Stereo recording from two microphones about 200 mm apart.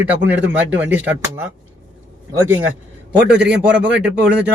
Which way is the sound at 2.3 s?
15° right (ahead or behind).